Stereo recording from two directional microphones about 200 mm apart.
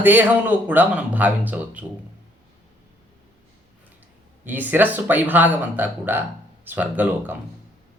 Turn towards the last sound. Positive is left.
turn(degrees=-10)  # may be behind; listen again after turning